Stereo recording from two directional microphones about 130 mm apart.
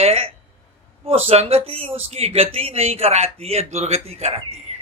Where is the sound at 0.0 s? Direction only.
50° right (ahead or behind).